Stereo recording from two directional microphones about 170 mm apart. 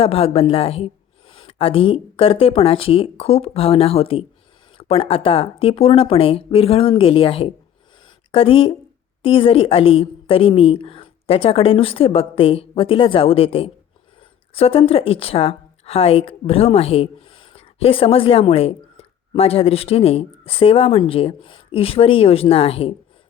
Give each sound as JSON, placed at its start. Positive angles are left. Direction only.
{"t": 0.0, "sound": "a woman's voice", "side_deg": 35}